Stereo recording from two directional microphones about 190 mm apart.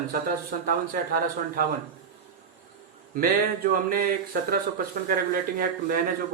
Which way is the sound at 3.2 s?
50° right (ahead or behind).